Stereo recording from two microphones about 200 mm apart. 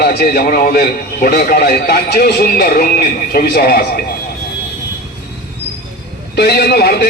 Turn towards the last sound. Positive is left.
turn(degrees=50)  # may be behind; listen again after turning